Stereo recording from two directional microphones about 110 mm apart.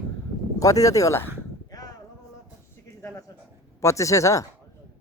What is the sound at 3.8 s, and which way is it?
Speech, 30° left (ahead or behind).